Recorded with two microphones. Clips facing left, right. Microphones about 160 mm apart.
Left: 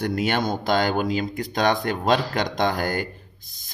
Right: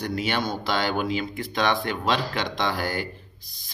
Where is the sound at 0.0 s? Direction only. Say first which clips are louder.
Left 3 dB; 50° left (ahead or behind).